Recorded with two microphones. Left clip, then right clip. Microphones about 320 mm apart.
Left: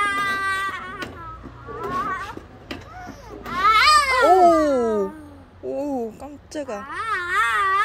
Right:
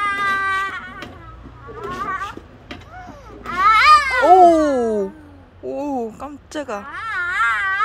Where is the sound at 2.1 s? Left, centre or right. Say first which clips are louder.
Right 4 dB; centre.